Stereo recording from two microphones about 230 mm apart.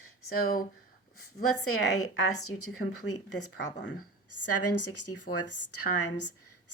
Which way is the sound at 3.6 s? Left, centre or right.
Left.